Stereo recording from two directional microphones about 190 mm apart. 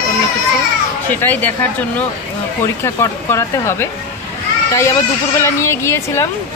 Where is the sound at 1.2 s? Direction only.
10° left (ahead or behind).